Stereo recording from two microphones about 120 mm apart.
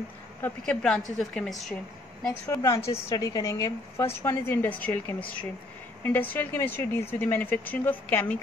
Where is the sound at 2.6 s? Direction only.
25° left (ahead or behind).